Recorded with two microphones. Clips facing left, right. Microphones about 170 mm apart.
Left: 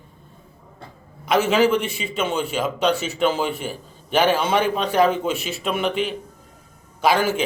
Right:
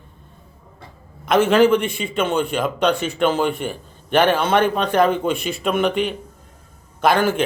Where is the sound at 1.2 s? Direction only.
55° right (ahead or behind).